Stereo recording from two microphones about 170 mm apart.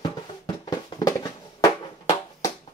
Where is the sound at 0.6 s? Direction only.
20° left (ahead or behind).